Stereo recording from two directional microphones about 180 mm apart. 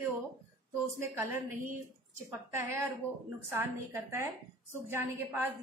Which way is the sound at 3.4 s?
15° right (ahead or behind).